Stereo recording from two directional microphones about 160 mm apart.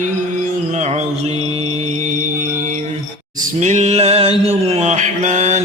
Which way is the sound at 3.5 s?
50° right (ahead or behind).